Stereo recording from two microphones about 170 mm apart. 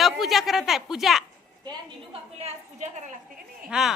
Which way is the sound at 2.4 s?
40° right (ahead or behind).